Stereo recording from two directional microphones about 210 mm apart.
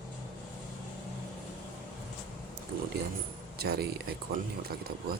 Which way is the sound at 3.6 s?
50° right (ahead or behind).